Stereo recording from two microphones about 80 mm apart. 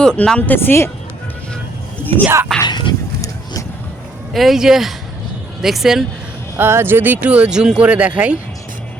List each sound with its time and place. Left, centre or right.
0.0 s speech: centre; by 0.9 s left
2.2 s speech: right
2.6 s speech: left
4.4 s speech: centre
6.6 s speech: right